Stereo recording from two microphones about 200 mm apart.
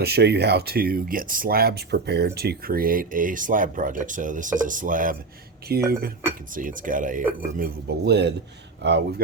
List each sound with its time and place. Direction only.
0.0 s speech: 55° right (ahead or behind)
7.6 s speech: 55° right (ahead or behind)